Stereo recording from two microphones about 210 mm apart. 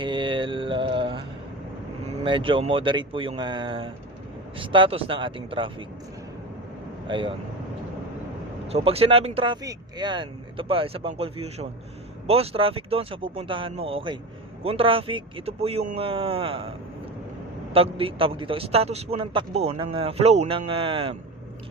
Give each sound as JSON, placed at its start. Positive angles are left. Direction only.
{"t": 0.0, "sound": "mantra", "side_deg": -25}
{"t": 2.2, "sound": "a man's voice", "side_deg": -25}
{"t": 7.1, "sound": "a man's voice", "side_deg": -25}
{"t": 8.6, "sound": "a man's voice", "side_deg": -30}
{"t": 17.7, "sound": "a man's voice", "side_deg": -25}